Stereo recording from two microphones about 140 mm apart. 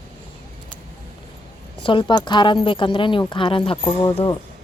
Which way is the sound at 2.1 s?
35° left (ahead or behind).